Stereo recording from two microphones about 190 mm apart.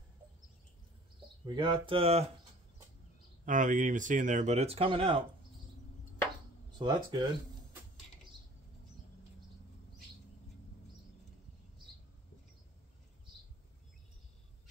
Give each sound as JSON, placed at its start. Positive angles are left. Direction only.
{"t": 1.4, "sound": "speech", "side_deg": -25}
{"t": 3.4, "sound": "speech", "side_deg": -45}
{"t": 6.8, "sound": "speech", "side_deg": -25}